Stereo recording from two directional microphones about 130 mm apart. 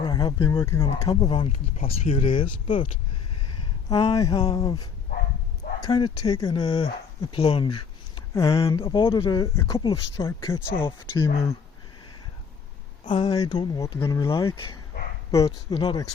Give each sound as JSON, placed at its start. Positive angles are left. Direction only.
{"t": 0.0, "sound": "a sound", "side_deg": 30}
{"t": 0.3, "sound": "speech", "side_deg": 20}
{"t": 1.0, "sound": "speech", "side_deg": 35}
{"t": 3.8, "sound": "speech", "side_deg": 40}
{"t": 4.5, "sound": "speech", "side_deg": 30}
{"t": 8.3, "sound": "speech", "side_deg": 25}
{"t": 8.6, "sound": "speech", "side_deg": 40}
{"t": 10.8, "sound": "speech", "side_deg": 35}
{"t": 13.1, "sound": "speech", "side_deg": 40}
{"t": 13.3, "sound": "speech", "side_deg": 30}
{"t": 15.7, "sound": "speech", "side_deg": 40}